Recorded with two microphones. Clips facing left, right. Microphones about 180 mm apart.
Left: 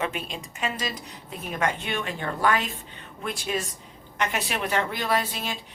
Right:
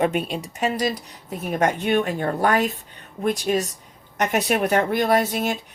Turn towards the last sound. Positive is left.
turn(degrees=-45)  # may be behind; listen again after turning